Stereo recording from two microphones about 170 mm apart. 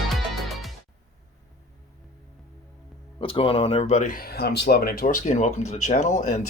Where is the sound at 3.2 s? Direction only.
30° left (ahead or behind).